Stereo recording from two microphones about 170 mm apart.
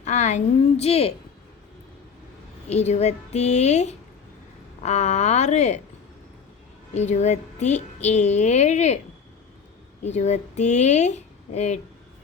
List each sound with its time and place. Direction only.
0.0 s a woman's voice: 45° left (ahead or behind)
2.6 s a woman's voice: 40° left (ahead or behind)
6.9 s a woman's voice: 40° left (ahead or behind)
10.0 s a woman's voice: 40° left (ahead or behind)